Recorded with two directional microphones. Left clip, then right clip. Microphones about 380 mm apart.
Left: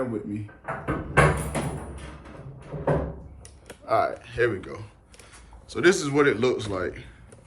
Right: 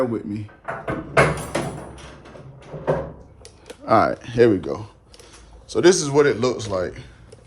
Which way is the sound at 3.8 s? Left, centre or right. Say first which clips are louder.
Right 6 dB; right.